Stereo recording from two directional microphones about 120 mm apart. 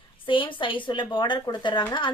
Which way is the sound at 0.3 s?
45° left (ahead or behind).